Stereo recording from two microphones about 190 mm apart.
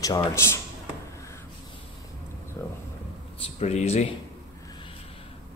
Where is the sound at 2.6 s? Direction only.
15° left (ahead or behind).